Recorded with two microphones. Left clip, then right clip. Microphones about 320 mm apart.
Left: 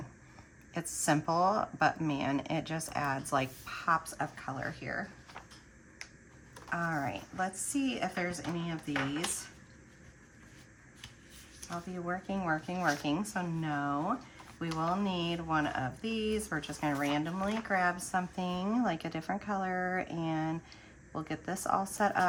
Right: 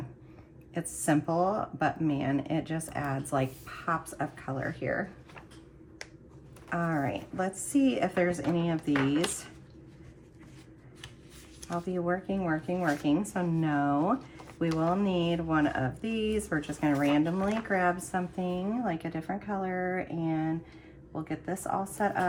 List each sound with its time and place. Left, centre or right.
0.7 s speech: centre
6.7 s a woman's voice: centre
11.7 s a woman's voice: centre